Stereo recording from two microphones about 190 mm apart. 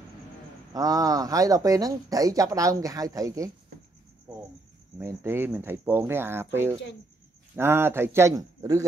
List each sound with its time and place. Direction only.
0.7 s speech: 20° right (ahead or behind)
4.9 s speech: 15° right (ahead or behind)